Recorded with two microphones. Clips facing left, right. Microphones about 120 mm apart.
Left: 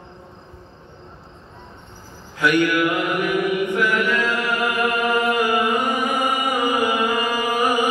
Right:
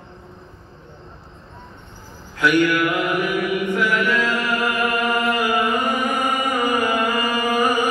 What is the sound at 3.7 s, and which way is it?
Chant, centre (ahead or behind).